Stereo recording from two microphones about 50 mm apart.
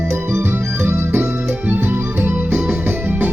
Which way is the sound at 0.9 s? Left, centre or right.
Right.